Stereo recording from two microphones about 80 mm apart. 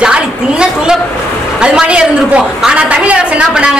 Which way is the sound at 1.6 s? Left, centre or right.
Centre.